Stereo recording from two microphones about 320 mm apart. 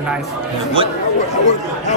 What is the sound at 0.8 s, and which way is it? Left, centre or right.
Speech, centre.